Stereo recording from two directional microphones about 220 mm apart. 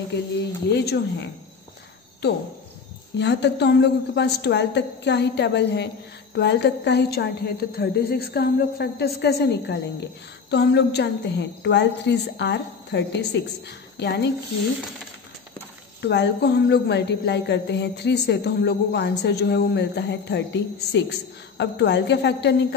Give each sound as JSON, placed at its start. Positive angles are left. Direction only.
{"t": 0.7, "sound": "a woman's voice", "side_deg": 50}
{"t": 3.2, "sound": "a woman's voice", "side_deg": 50}
{"t": 16.0, "sound": "a woman's voice", "side_deg": 50}